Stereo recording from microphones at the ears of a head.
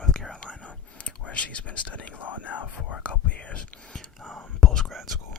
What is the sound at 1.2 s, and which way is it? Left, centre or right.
Speech, left.